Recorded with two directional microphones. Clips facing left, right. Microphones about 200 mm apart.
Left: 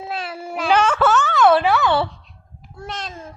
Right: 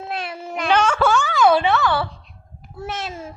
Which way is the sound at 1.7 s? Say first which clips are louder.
Left 2 dB; 20° left (ahead or behind).